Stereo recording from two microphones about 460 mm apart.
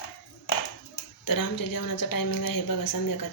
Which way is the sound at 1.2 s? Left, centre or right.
Left.